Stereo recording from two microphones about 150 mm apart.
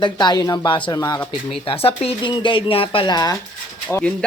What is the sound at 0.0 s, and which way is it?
Speech, 30° left (ahead or behind).